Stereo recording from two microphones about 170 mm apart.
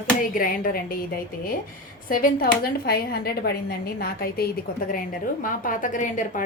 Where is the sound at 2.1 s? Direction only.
55° left (ahead or behind).